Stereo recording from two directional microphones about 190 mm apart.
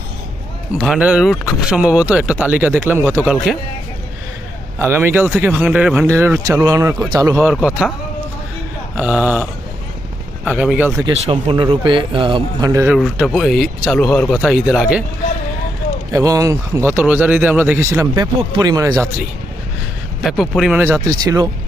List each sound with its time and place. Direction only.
0.8 s speech: 5° right (ahead or behind)
4.8 s speech: 10° right (ahead or behind)
7.5 s speech: 5° right (ahead or behind)
9.0 s speech: 5° right (ahead or behind)
11.0 s a man's voice: 25° right (ahead or behind)
13.0 s speech: centre (ahead or behind)
16.1 s speech: 15° right (ahead or behind)
20.2 s speech: centre (ahead or behind)
20.8 s a man's voice: 15° right (ahead or behind)